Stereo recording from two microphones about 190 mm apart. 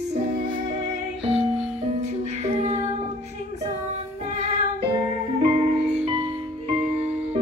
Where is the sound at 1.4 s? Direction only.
5° right (ahead or behind).